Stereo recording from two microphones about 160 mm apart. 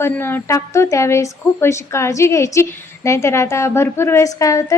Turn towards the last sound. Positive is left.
turn(degrees=20)  # may be behind; listen again after turning